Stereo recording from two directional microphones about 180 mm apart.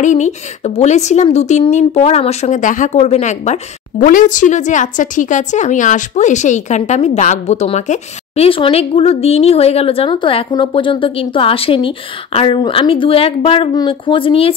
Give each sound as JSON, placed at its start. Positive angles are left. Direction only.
{"t": 0.0, "sound": "a woman's voice", "side_deg": 40}